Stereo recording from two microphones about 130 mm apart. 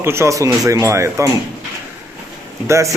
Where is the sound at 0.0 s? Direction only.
20° right (ahead or behind).